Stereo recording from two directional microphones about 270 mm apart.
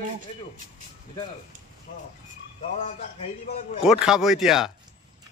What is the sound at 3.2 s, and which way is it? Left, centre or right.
Speech, left.